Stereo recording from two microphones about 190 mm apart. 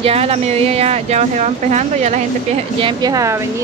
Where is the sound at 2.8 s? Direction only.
25° right (ahead or behind).